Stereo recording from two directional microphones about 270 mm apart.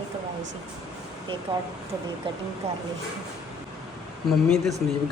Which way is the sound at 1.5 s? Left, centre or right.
Centre.